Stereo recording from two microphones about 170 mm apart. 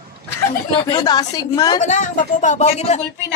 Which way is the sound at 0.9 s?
25° left (ahead or behind).